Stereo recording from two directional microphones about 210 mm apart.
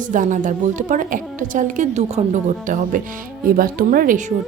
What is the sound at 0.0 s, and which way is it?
A woman's voice, 40° right (ahead or behind).